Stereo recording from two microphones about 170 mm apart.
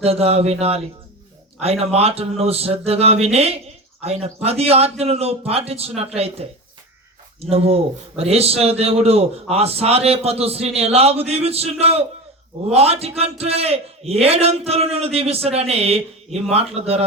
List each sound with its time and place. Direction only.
0.0 s a man's voice: 35° right (ahead or behind)
7.5 s a man's voice: 35° right (ahead or behind)